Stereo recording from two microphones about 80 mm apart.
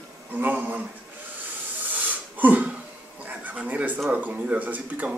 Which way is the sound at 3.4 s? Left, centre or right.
Centre.